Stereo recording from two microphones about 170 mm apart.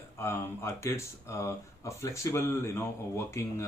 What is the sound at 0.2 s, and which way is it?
Speech, 15° left (ahead or behind).